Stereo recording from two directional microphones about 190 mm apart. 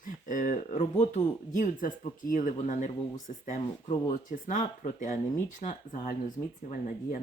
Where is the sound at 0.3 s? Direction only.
45° left (ahead or behind).